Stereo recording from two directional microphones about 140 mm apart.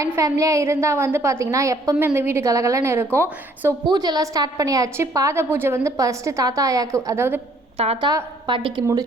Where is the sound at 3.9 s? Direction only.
30° right (ahead or behind).